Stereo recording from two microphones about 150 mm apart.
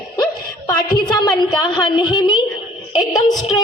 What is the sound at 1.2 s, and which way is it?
A man's voice, 30° left (ahead or behind).